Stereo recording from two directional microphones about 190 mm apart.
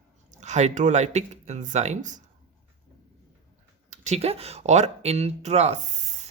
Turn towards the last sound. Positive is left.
turn(degrees=-40)  # may be behind; listen again after turning